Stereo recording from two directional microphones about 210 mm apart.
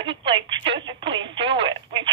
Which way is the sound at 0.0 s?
25° right (ahead or behind).